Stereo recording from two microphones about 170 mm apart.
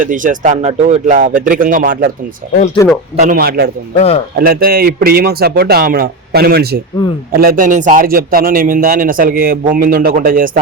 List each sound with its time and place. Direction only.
0.0 s speech: 50° right (ahead or behind)
3.2 s a man's voice: 55° right (ahead or behind)
3.9 s speech: 35° left (ahead or behind)
4.4 s a man's voice: 60° right (ahead or behind)